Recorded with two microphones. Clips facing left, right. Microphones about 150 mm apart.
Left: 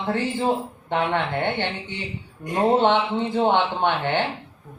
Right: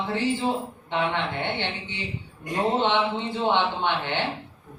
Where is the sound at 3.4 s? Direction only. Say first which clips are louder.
Left 4 dB; 50° left (ahead or behind).